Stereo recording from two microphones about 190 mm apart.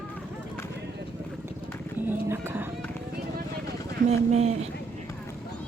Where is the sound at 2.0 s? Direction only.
10° right (ahead or behind).